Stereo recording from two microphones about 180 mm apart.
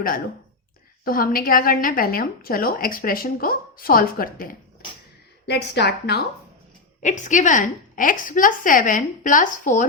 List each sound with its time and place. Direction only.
1.0 s a woman's voice: 55° left (ahead or behind)
5.5 s a woman's voice: 65° left (ahead or behind)
7.0 s a woman's voice: 40° left (ahead or behind)